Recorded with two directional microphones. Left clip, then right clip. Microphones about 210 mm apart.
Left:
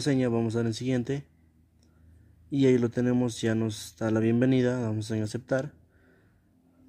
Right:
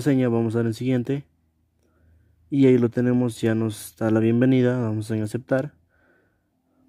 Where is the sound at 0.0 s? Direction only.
45° right (ahead or behind).